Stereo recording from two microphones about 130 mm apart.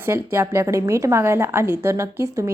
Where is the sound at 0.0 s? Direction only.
20° right (ahead or behind).